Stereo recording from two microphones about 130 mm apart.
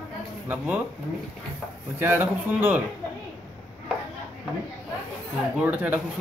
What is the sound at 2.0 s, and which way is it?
Speech, 15° right (ahead or behind).